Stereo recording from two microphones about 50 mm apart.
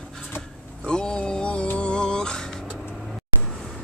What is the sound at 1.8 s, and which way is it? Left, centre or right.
Music, centre.